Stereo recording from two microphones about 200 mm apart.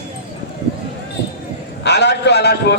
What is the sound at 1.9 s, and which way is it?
Speech, 60° left (ahead or behind).